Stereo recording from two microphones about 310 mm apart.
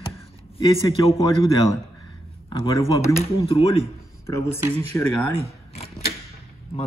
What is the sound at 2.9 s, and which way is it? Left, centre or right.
Speech, centre.